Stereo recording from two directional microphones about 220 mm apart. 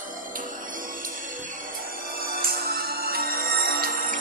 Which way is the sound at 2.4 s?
45° right (ahead or behind).